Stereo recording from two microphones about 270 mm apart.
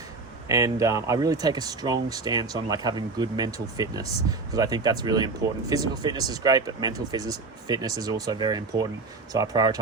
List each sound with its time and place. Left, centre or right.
0.4 s speech: centre